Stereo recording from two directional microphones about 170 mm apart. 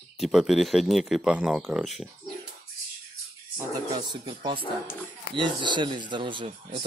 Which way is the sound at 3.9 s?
25° right (ahead or behind).